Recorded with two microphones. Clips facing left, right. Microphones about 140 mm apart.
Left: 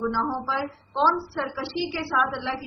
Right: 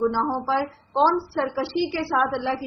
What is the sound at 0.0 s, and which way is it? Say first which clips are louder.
A woman's voice: right 4 dB; 50° right (ahead or behind).